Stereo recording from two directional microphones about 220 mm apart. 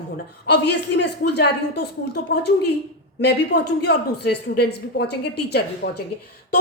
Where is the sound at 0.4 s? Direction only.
50° left (ahead or behind).